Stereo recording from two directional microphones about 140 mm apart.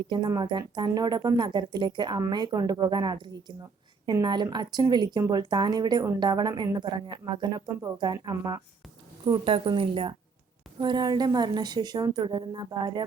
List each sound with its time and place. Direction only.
0.1 s a woman's voice: 30° right (ahead or behind)